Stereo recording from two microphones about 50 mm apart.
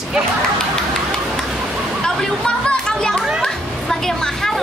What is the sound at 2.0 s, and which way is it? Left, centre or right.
Speech, centre.